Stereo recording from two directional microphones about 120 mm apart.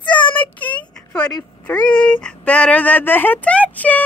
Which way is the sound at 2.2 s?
10° left (ahead or behind).